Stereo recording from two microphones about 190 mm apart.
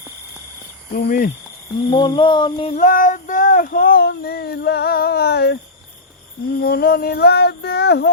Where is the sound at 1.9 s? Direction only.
25° left (ahead or behind).